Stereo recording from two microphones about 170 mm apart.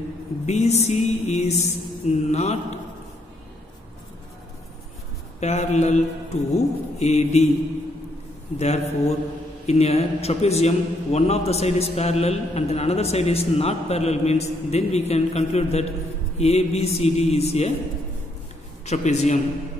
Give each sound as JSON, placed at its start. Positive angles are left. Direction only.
{"t": 0.5, "sound": "a man's voice", "side_deg": 40}
{"t": 5.4, "sound": "a man's voice", "side_deg": 40}
{"t": 8.5, "sound": "a man's voice", "side_deg": 40}
{"t": 18.9, "sound": "a man's voice", "side_deg": 40}